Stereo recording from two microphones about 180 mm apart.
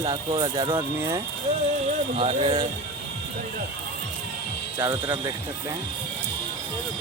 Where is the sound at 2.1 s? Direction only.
35° right (ahead or behind).